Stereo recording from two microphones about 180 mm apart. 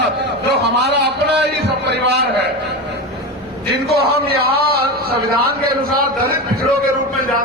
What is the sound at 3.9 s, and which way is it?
A man's voice, 60° right (ahead or behind).